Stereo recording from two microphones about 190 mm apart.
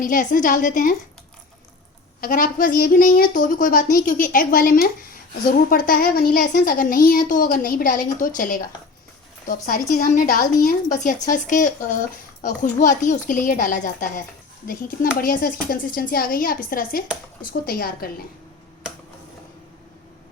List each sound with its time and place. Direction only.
0.0 s a woman's voice: 45° left (ahead or behind)
2.2 s a woman's voice: 45° left (ahead or behind)